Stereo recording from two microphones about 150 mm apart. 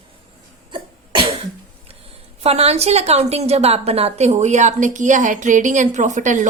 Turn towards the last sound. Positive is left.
turn(degrees=-55)  # may be behind; listen again after turning